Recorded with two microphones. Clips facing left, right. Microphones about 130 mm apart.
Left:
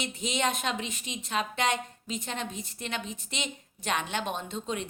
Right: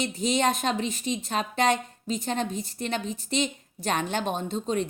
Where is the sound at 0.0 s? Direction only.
35° right (ahead or behind).